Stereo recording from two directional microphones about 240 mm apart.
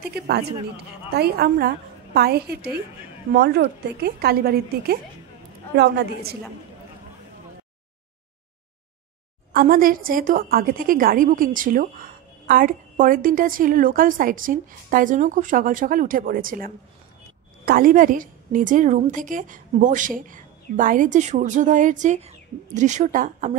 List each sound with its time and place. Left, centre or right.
0.1 s a woman's voice: right
9.5 s a woman's voice: right